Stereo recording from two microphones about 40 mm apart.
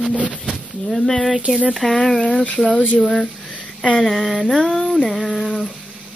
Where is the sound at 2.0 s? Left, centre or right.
Centre.